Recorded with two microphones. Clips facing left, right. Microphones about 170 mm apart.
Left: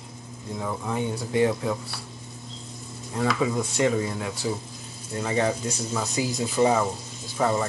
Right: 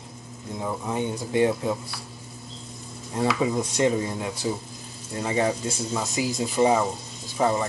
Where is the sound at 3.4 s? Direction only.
20° right (ahead or behind).